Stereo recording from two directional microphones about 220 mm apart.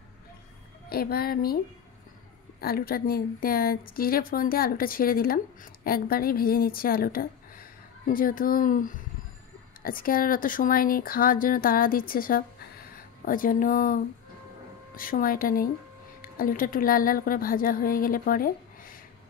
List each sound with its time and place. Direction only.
0.8 s speech: 45° left (ahead or behind)
2.6 s a woman's voice: 45° left (ahead or behind)
15.0 s a woman's voice: 40° left (ahead or behind)